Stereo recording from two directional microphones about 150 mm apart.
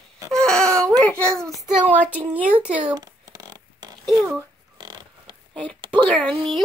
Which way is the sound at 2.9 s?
25° right (ahead or behind).